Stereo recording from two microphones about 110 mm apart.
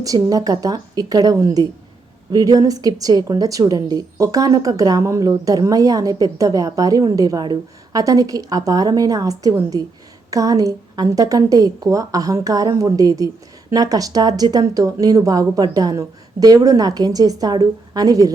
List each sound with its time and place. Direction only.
0.0 s a woman's voice: 35° right (ahead or behind)